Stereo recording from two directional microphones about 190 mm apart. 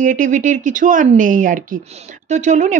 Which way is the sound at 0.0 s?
45° right (ahead or behind).